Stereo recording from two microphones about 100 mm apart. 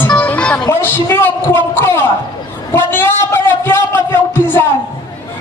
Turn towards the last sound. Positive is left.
turn(degrees=20)  # may be behind; listen again after turning